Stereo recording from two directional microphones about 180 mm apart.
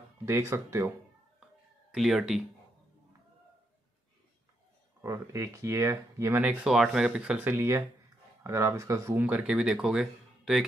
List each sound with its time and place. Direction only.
0.2 s speech: 15° right (ahead or behind)
1.9 s speech: centre (ahead or behind)
5.0 s speech: 15° right (ahead or behind)